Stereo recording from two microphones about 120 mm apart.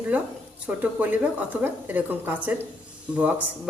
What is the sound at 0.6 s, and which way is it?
Speech, 15° right (ahead or behind).